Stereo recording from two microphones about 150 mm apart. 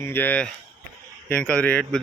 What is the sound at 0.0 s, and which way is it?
Speech, 15° left (ahead or behind).